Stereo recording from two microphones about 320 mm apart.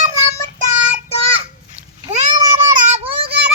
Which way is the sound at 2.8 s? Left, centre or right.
Right.